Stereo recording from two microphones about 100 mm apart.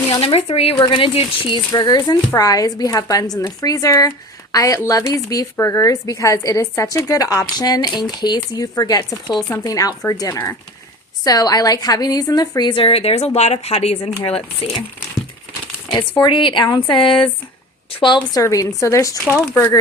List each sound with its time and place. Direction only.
0.1 s speech: 65° left (ahead or behind)
0.8 s a woman's voice: 55° left (ahead or behind)
12.8 s speech: 80° left
14.3 s speech: 70° left (ahead or behind)
16.2 s a woman's voice: 55° left (ahead or behind)
18.4 s a woman's voice: 30° left (ahead or behind)